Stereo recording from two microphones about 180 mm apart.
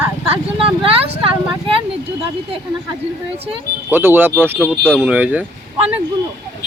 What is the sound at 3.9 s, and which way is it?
Speech, 10° right (ahead or behind).